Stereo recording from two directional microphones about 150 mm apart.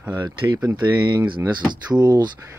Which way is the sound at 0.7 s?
30° right (ahead or behind).